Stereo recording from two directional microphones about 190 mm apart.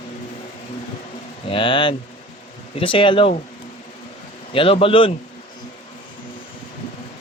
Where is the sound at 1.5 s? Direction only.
25° left (ahead or behind).